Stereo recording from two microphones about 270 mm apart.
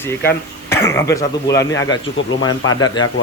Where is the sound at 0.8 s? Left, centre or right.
Centre.